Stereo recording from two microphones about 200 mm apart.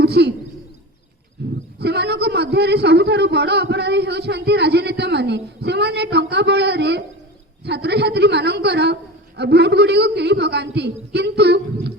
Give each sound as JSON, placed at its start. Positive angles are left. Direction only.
{"t": 0.0, "sound": "a man's voice", "side_deg": -55}
{"t": 1.4, "sound": "wild animals", "side_deg": -55}
{"t": 1.8, "sound": "a man's voice", "side_deg": -55}